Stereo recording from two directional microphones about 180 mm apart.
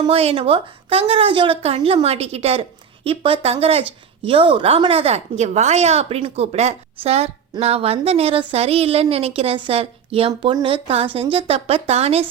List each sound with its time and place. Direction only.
0.0 s a woman's voice: 35° right (ahead or behind)